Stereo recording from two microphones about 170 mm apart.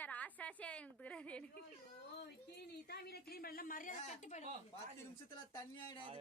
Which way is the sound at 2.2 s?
70° left (ahead or behind).